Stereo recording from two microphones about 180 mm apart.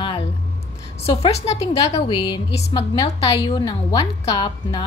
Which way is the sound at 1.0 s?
35° left (ahead or behind).